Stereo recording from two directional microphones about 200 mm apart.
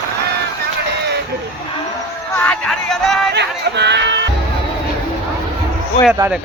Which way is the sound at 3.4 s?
60° right (ahead or behind).